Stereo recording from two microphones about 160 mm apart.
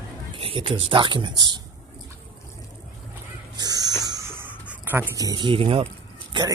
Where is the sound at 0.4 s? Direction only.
35° right (ahead or behind).